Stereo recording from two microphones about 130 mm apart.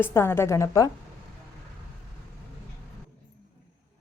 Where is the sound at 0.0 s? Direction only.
20° left (ahead or behind).